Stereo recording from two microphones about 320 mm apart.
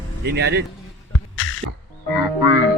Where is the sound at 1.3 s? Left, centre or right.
Left.